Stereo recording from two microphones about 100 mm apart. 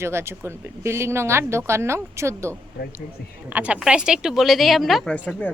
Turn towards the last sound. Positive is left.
turn(degrees=15)  # may be behind; listen again after turning